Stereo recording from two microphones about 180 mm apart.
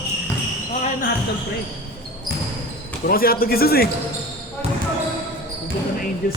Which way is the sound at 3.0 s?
55° left (ahead or behind).